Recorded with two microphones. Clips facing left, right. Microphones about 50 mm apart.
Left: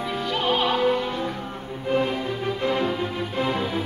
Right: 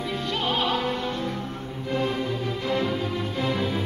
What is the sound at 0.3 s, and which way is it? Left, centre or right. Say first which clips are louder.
Opera: left 3 dB; centre.